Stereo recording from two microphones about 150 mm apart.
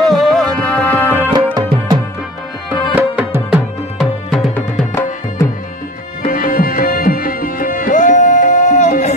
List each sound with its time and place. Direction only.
0.0 s music: centre (ahead or behind)
1.3 s music: 35° right (ahead or behind)
2.9 s music: 10° right (ahead or behind)
4.0 s music: centre (ahead or behind)
4.6 s music: 10° left (ahead or behind)
6.2 s music: 75° left (ahead or behind); by 9.1 s 50° left (ahead or behind)